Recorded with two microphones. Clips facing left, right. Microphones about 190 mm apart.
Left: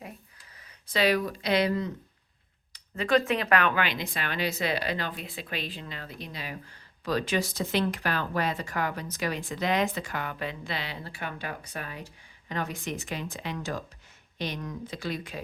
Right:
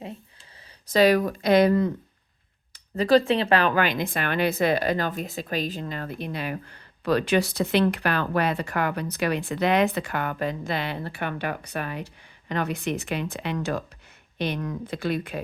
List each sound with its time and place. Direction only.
0.9 s speech: 45° right (ahead or behind)
2.7 s speech: 35° right (ahead or behind); by 15.4 s 60° right (ahead or behind)